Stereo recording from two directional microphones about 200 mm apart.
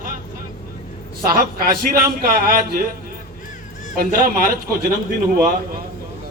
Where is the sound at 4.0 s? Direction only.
45° right (ahead or behind).